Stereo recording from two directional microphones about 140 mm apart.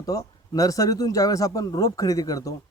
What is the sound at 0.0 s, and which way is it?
Speech, 25° left (ahead or behind).